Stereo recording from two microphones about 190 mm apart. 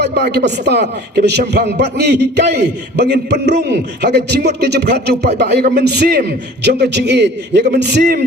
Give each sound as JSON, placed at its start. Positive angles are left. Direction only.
{"t": 0.0, "sound": "a man's voice", "side_deg": -60}